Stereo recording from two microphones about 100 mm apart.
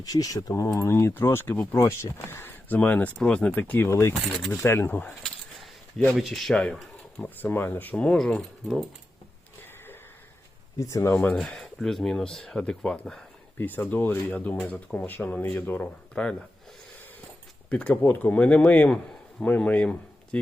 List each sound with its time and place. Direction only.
0.0 s speech: 40° left (ahead or behind)
4.3 s speech: centre (ahead or behind)
4.6 s speech: 25° left (ahead or behind)
6.1 s speech: centre (ahead or behind)
7.4 s speech: 20° left (ahead or behind); by 8.8 s centre (ahead or behind)
10.8 s speech: 30° left (ahead or behind)
11.1 s speech: 10° left (ahead or behind)
13.6 s speech: 20° left (ahead or behind)
17.7 s speech: 10° left (ahead or behind)